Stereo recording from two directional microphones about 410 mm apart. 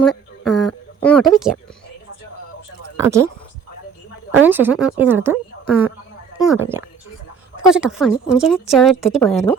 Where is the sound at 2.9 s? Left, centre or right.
Centre.